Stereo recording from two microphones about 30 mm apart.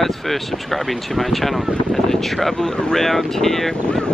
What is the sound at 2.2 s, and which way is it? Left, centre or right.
Speech, centre.